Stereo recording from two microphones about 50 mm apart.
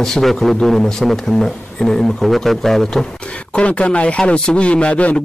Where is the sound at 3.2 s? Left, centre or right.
Left.